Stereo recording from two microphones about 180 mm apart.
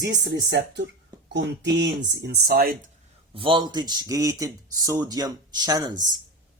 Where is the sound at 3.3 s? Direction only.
30° right (ahead or behind).